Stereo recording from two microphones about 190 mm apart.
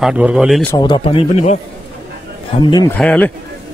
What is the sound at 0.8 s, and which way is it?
Speech, 25° left (ahead or behind).